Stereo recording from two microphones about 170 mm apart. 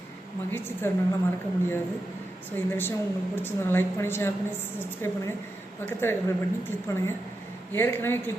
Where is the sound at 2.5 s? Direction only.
10° left (ahead or behind).